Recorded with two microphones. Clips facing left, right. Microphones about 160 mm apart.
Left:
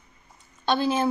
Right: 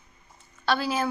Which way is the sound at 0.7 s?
25° left (ahead or behind).